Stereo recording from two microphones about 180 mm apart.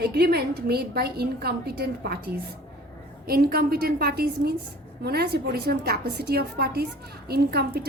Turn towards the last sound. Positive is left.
turn(degrees=-60)  # may be behind; listen again after turning